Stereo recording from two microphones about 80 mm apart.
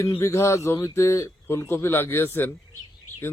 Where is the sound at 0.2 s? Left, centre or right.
Left.